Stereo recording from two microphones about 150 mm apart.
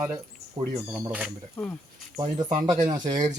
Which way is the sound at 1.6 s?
10° left (ahead or behind).